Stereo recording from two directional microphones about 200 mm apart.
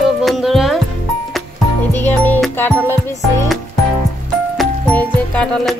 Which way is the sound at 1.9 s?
10° left (ahead or behind).